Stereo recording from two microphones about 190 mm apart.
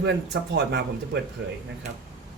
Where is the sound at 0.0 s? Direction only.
65° right (ahead or behind).